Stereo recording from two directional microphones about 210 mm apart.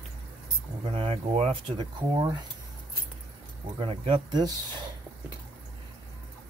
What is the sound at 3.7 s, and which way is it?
Speech, 25° right (ahead or behind).